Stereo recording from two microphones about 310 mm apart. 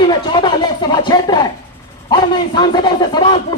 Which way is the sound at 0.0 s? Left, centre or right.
Centre.